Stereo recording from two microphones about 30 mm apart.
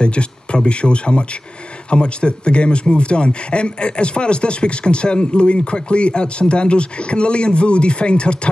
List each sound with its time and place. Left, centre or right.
0.0 s speech: left